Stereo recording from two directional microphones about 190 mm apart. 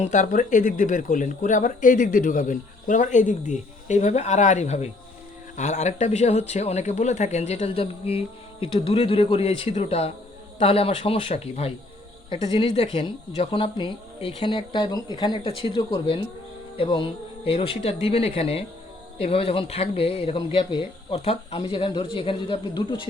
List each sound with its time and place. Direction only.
0.0 s speech: 40° left (ahead or behind); by 23.0 s 25° left (ahead or behind)